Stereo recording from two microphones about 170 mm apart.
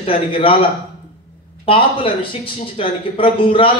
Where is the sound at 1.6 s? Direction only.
30° left (ahead or behind).